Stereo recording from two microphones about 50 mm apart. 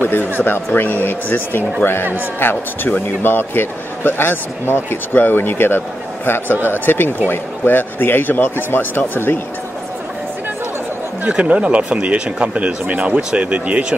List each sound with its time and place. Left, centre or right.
0.0 s a man's voice: left
11.2 s speech: right